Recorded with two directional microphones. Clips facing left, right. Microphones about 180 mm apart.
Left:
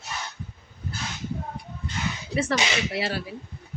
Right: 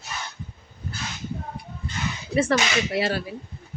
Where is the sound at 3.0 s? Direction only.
50° right (ahead or behind).